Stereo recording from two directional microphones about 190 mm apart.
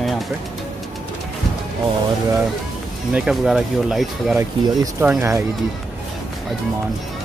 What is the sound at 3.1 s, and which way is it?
Speech, 5° right (ahead or behind).